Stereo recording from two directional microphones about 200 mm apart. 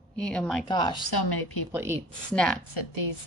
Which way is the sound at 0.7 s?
20° left (ahead or behind).